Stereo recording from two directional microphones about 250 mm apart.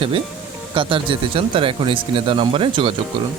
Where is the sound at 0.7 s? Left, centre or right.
Centre.